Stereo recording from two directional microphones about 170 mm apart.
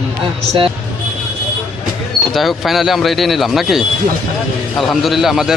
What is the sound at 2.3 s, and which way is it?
Speech, centre (ahead or behind).